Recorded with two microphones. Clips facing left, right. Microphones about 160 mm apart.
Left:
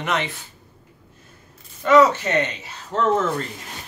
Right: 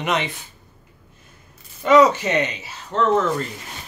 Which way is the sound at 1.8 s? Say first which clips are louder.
Right 1 dB; 15° right (ahead or behind).